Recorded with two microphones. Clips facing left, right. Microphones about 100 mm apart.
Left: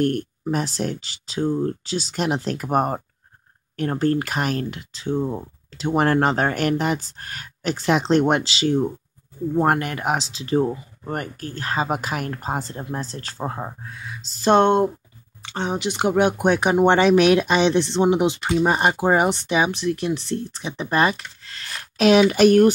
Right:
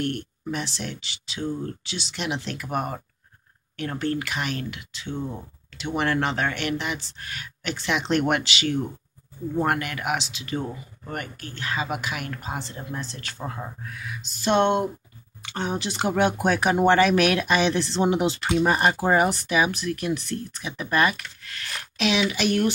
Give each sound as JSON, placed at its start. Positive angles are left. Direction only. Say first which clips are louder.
{"t": 0.0, "sound": "speech", "louder": "left 7 dB", "side_deg": 40}
{"t": 15.4, "sound": "speech", "louder": "left 3 dB", "side_deg": 25}
{"t": 21.9, "sound": "speech", "louder": "left 9 dB", "side_deg": 45}